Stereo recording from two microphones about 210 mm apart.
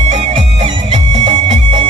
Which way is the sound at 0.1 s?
25° right (ahead or behind).